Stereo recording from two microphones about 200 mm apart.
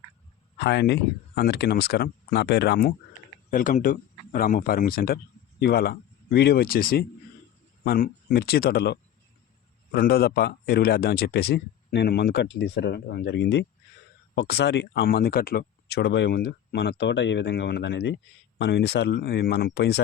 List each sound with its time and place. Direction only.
0.6 s a man's voice: 60° left (ahead or behind)